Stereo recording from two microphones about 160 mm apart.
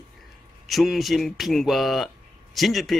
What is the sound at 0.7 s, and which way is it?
Speech, centre (ahead or behind).